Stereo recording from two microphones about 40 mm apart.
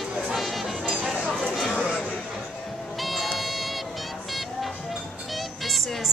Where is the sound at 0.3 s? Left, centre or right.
Centre.